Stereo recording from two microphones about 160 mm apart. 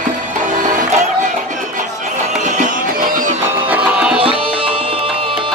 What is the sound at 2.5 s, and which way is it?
Music, 55° right (ahead or behind).